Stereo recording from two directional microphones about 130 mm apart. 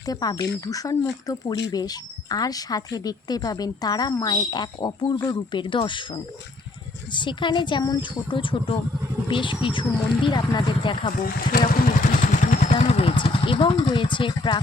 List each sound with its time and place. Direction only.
0.0 s speech: 30° left (ahead or behind)
11.2 s speech: 90° left
12.2 s vehicle: 85° left; by 12.7 s 65° left (ahead or behind)
12.8 s speech: 50° left (ahead or behind)